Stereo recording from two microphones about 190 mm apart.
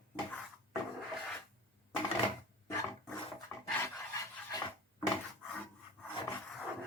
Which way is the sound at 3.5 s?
15° left (ahead or behind).